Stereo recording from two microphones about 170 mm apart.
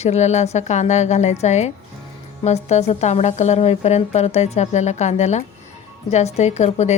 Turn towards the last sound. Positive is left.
turn(degrees=40)  # may be behind; listen again after turning